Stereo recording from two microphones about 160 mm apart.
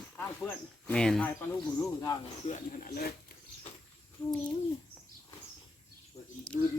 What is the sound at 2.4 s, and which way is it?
Speech, 65° left (ahead or behind).